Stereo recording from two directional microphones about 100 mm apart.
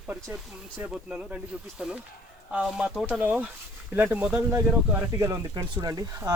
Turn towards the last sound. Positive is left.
turn(degrees=-40)  # may be behind; listen again after turning